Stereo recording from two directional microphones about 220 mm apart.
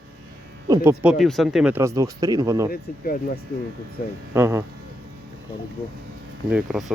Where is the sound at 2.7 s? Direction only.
45° left (ahead or behind).